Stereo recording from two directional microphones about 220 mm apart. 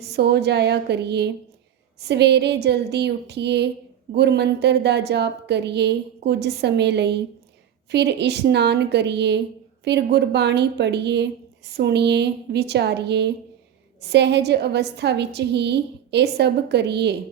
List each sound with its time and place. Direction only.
0.1 s a woman's voice: 50° right (ahead or behind)